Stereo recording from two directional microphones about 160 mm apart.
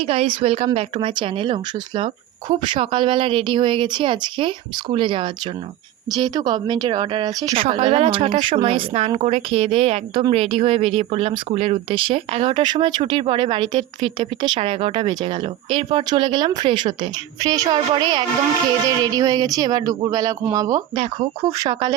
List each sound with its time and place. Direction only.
0.0 s speech: 35° right (ahead or behind)